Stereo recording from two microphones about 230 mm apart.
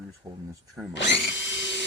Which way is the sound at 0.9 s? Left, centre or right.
Left.